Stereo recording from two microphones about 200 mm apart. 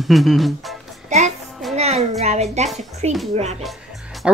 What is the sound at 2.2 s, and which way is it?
Speech, 35° right (ahead or behind).